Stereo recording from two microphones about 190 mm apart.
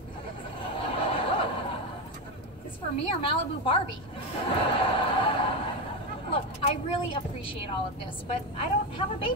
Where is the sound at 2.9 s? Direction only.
30° left (ahead or behind).